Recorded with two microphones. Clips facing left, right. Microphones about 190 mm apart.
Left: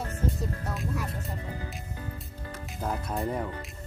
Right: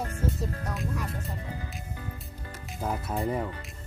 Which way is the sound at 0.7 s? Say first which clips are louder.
Even; centre (ahead or behind).